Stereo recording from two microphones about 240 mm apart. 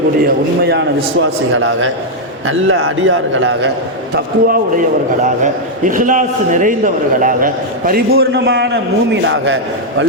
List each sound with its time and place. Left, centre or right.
0.6 s a man's voice: right
4.1 s a man's voice: right
8.1 s a man's voice: right